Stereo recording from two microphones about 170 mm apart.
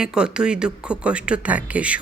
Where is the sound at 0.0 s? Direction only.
5° right (ahead or behind).